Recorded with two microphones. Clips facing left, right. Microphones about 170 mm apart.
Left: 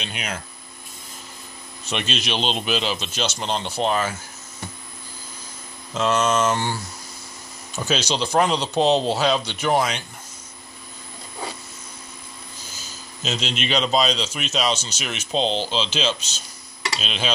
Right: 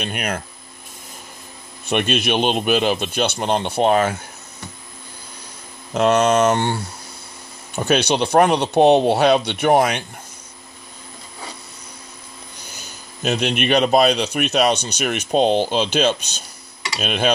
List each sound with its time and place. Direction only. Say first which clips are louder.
0.0 s a man's voice: right 6 dB; 55° right (ahead or behind)
1.9 s a man's voice: right 7 dB; 55° right (ahead or behind)
5.9 s a man's voice: right 5 dB; 60° right (ahead or behind)
12.6 s a man's voice: right 2 dB; 65° right (ahead or behind)